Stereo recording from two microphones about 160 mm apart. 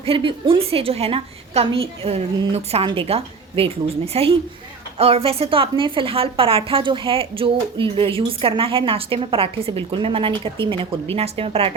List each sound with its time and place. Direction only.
0.0 s a woman's voice: 35° right (ahead or behind)